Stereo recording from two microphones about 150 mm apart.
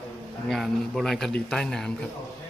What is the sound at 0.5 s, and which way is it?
A man's voice, centre (ahead or behind).